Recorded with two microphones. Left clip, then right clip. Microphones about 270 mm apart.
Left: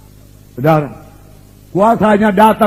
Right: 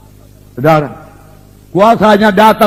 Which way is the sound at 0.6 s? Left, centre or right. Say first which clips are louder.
Right 3 dB; right.